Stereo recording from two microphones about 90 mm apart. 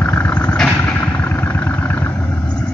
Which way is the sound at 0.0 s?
25° left (ahead or behind).